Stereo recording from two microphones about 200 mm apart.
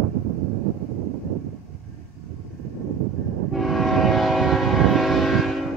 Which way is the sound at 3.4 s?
Centre (ahead or behind).